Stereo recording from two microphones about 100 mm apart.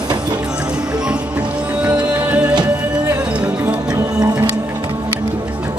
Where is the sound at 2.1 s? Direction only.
15° right (ahead or behind).